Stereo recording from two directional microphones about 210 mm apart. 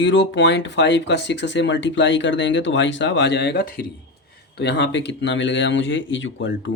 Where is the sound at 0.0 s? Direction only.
60° left (ahead or behind).